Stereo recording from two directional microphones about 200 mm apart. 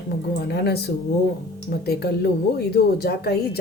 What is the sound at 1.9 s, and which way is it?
Speech, 50° left (ahead or behind).